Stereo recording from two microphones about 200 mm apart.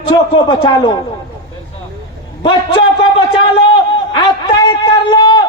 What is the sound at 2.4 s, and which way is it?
Speech, 25° left (ahead or behind).